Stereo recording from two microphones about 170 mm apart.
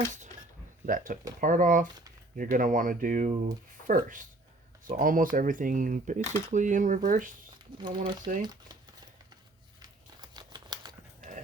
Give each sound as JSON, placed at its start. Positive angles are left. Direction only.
{"t": 0.9, "sound": "speech", "side_deg": -55}
{"t": 7.9, "sound": "speech", "side_deg": -30}
{"t": 9.8, "sound": "crumpling", "side_deg": -25}
{"t": 11.2, "sound": "a sound", "side_deg": -50}